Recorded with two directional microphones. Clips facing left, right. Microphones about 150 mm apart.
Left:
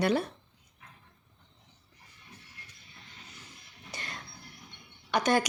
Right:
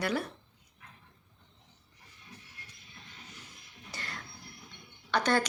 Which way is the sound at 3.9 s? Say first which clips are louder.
Left 1 dB; 20° left (ahead or behind).